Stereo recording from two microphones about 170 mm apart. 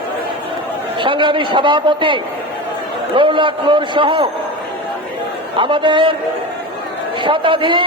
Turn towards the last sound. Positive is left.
turn(degrees=-30)  # may be behind; listen again after turning